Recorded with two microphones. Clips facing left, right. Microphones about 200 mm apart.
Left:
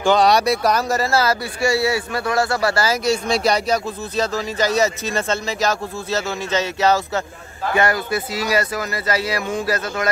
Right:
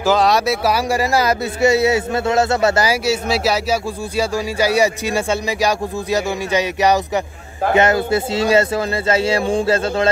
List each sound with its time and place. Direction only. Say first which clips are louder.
0.0 s speech: even; centre (ahead or behind); by 3.0 s 20° right (ahead or behind)
3.1 s speech: even; 5° right (ahead or behind); by 10.0 s 30° right (ahead or behind)